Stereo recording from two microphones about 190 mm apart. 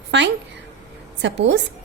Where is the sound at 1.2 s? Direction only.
70° right (ahead or behind).